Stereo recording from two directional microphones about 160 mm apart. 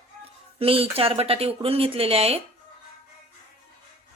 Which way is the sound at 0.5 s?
35° right (ahead or behind).